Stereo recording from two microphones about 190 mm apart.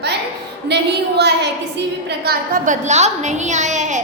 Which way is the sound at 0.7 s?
60° right (ahead or behind).